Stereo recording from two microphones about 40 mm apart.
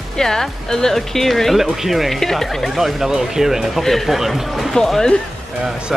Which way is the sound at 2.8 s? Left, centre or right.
Centre.